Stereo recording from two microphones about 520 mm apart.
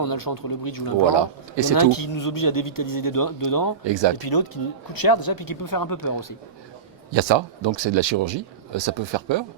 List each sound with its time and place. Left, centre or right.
0.0 s speech: left
1.1 s speech: right
1.7 s speech: left
3.8 s speech: right
4.2 s speech: left
7.1 s speech: right